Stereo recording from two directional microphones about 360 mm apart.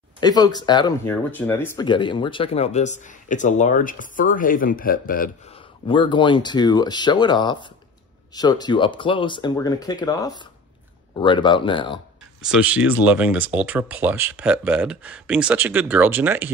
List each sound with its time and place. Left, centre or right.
0.2 s speech: centre
5.9 s speech: centre
12.4 s speech: centre